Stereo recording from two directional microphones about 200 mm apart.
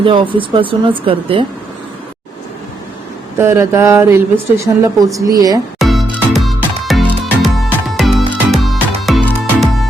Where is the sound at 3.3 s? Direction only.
10° right (ahead or behind).